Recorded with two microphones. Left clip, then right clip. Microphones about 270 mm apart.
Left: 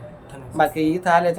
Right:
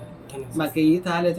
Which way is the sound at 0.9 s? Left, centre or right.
Left.